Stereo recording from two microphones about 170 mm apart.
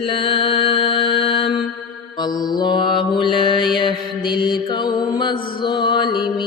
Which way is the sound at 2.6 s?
25° left (ahead or behind).